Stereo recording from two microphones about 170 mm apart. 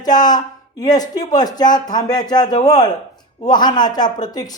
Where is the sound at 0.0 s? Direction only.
25° left (ahead or behind).